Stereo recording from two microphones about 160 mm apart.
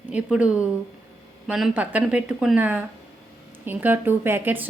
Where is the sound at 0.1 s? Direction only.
10° right (ahead or behind).